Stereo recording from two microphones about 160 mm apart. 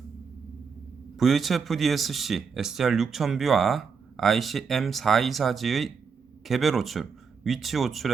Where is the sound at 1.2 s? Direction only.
Centre (ahead or behind).